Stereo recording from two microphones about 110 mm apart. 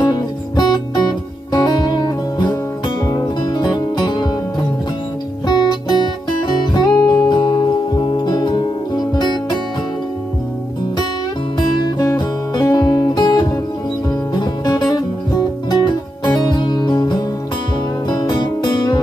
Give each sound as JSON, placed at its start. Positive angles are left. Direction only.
{"t": 0.0, "sound": "music", "side_deg": 40}
{"t": 5.5, "sound": "music", "side_deg": 40}
{"t": 11.8, "sound": "music", "side_deg": 40}